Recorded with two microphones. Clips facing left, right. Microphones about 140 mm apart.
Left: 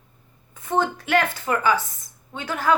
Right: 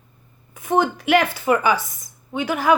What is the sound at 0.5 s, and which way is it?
A woman's voice, 10° right (ahead or behind).